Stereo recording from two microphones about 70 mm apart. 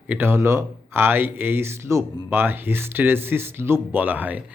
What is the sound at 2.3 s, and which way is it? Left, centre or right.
Speech, right.